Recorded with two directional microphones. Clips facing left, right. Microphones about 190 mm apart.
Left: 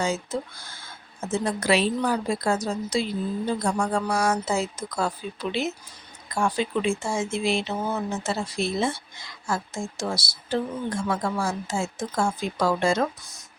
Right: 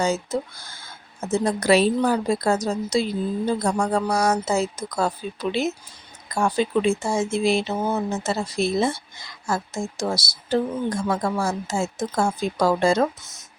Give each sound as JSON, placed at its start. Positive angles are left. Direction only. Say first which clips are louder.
{"t": 0.0, "sound": "a woman's voice", "louder": "right 4 dB", "side_deg": -40}